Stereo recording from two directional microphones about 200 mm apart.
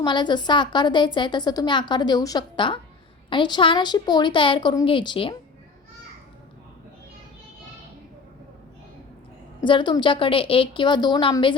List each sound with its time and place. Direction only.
0.0 s a woman's voice: 20° left (ahead or behind)
9.6 s a woman's voice: 25° left (ahead or behind)